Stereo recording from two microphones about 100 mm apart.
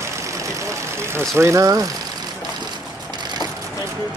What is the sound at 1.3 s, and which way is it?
Speech, 30° right (ahead or behind).